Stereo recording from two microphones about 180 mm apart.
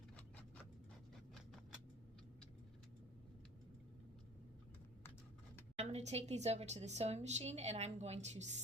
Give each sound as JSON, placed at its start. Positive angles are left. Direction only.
{"t": 5.7, "sound": "a woman's voice", "side_deg": -40}